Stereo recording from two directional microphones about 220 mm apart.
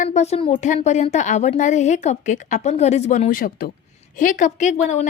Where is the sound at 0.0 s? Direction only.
30° left (ahead or behind).